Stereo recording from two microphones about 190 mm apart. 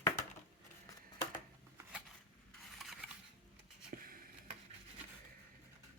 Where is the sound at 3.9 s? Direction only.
50° right (ahead or behind).